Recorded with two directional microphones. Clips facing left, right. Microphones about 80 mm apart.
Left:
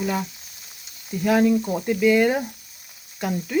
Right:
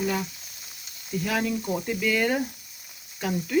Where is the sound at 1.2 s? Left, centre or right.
Centre.